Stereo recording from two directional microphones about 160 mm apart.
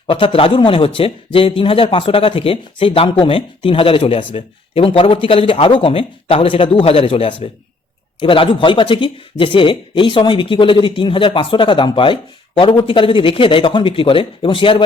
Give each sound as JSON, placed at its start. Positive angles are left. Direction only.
{"t": 0.1, "sound": "speech", "side_deg": 35}